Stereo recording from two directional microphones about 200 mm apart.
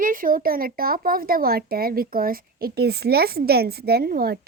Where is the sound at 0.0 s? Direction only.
45° right (ahead or behind).